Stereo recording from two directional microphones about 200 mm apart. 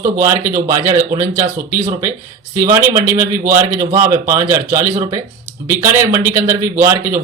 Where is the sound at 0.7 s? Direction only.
15° right (ahead or behind).